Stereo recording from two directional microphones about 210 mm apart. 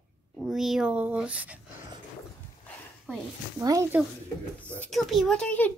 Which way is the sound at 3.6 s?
15° right (ahead or behind).